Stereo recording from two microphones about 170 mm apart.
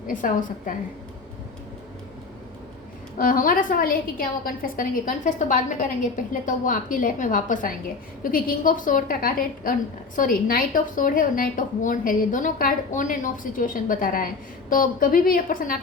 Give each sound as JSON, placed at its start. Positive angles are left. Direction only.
{"t": 0.1, "sound": "a woman's voice", "side_deg": 50}
{"t": 3.2, "sound": "a woman's voice", "side_deg": 55}